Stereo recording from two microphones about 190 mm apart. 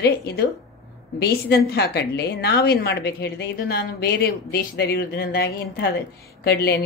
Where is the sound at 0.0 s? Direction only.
60° left (ahead or behind).